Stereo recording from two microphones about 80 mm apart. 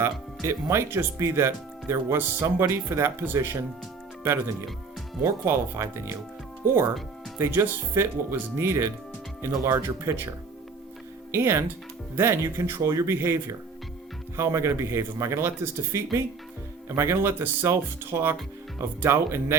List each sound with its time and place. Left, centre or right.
0.0 s speech: right
5.2 s speech: right
11.3 s speech: right